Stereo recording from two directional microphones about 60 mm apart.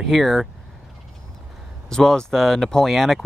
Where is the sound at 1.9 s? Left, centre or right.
Centre.